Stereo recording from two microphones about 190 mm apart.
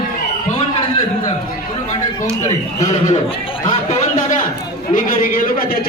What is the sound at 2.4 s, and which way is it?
A man's voice, 40° left (ahead or behind).